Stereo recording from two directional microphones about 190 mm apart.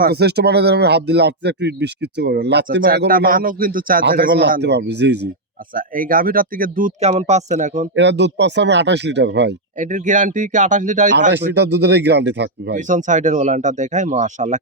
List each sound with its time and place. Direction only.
0.0 s speech: 60° right (ahead or behind)
5.7 s speech: 45° right (ahead or behind)
7.0 s speech: 35° right (ahead or behind)
7.9 s speech: 65° right (ahead or behind)
9.7 s speech: 40° right (ahead or behind)
11.3 s speech: 65° right (ahead or behind)
12.7 s speech: 40° right (ahead or behind)